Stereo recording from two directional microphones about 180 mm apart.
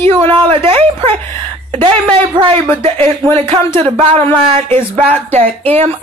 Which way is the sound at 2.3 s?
30° right (ahead or behind).